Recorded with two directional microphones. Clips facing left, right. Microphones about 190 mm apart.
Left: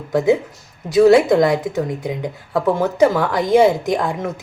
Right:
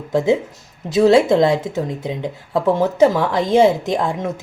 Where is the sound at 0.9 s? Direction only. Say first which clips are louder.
Left 1 dB; 25° right (ahead or behind).